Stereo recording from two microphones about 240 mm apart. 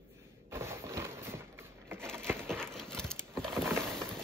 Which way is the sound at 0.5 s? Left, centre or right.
Centre.